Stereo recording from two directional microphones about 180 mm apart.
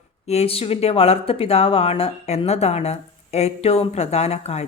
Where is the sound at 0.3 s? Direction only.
35° left (ahead or behind).